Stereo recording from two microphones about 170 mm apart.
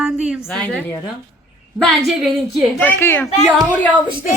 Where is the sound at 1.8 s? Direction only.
Centre (ahead or behind).